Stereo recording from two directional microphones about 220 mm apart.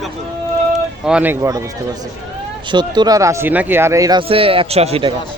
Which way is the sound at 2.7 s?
20° right (ahead or behind).